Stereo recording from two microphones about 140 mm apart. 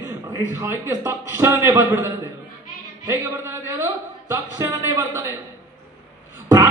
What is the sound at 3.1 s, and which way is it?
A man's voice, 20° right (ahead or behind).